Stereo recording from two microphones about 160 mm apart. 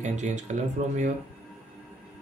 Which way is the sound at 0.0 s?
50° right (ahead or behind).